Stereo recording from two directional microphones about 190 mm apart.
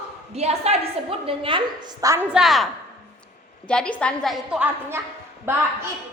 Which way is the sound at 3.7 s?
5° left (ahead or behind).